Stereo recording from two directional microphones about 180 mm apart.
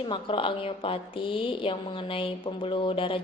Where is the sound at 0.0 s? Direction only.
30° left (ahead or behind).